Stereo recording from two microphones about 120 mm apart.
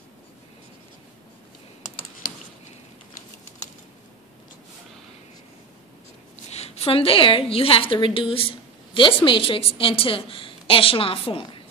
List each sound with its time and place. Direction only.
6.5 s a woman's voice: 60° left (ahead or behind)